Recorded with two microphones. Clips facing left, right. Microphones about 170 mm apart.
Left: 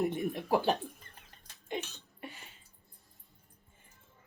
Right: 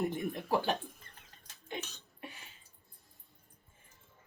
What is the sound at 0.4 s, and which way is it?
Speech, 15° left (ahead or behind).